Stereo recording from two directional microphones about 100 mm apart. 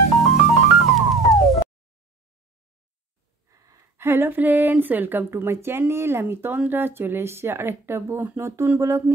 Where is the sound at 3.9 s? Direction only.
25° right (ahead or behind).